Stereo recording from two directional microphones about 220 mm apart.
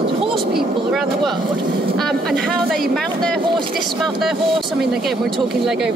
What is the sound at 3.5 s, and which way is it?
Speech, 20° right (ahead or behind).